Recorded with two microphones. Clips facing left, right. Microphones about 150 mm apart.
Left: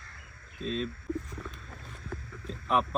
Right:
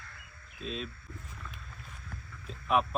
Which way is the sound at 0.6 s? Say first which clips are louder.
Left 6 dB; 5° right (ahead or behind).